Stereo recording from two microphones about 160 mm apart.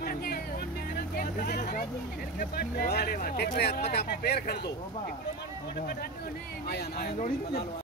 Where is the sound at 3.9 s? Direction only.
90° left.